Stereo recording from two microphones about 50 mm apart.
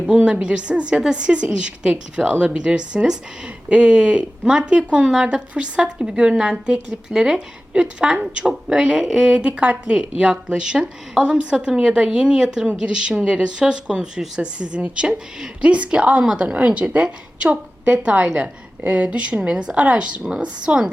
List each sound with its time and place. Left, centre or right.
0.4 s a woman's voice: right
9.5 s speech: right
9.8 s a woman's voice: centre